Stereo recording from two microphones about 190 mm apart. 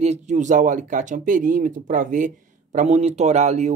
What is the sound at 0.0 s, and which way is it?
Speech, 40° right (ahead or behind).